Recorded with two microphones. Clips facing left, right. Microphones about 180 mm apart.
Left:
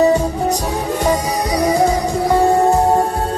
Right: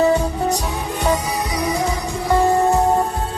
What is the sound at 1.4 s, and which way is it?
Music, 40° left (ahead or behind).